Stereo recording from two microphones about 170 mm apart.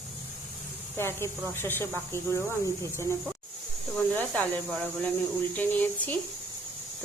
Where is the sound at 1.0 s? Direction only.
15° left (ahead or behind).